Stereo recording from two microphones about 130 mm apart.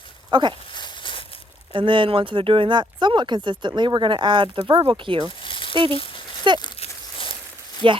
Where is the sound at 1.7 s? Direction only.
40° right (ahead or behind).